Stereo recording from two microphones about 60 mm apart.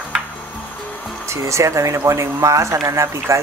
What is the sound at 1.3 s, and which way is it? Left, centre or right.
Speech, right.